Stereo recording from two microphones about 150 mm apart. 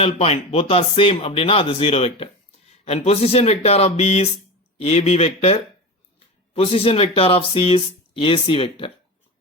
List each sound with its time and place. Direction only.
0.0 s speech: 40° left (ahead or behind)